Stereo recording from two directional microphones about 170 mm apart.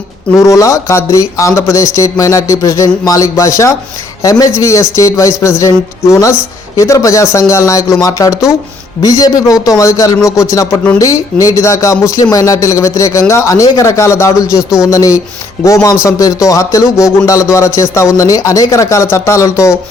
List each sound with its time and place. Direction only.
0.3 s a man's voice: 20° left (ahead or behind)